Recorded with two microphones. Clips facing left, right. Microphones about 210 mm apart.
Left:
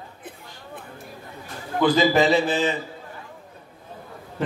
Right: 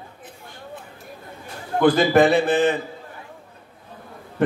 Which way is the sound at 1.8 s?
55° right (ahead or behind).